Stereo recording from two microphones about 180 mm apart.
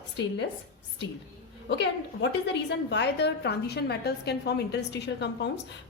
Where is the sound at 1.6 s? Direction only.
75° left (ahead or behind).